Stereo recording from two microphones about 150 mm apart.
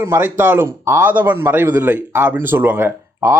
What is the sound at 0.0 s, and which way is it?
Speech, 15° right (ahead or behind).